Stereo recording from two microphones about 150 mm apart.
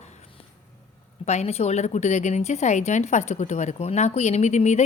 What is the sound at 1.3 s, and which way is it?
A woman's voice, 45° left (ahead or behind).